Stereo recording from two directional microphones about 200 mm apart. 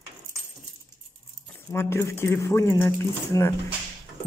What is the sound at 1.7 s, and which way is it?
Speech, 10° left (ahead or behind).